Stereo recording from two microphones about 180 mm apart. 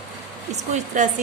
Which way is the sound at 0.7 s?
40° right (ahead or behind).